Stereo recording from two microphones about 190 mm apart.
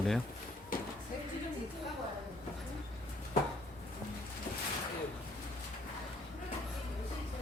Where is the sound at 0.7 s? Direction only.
45° left (ahead or behind).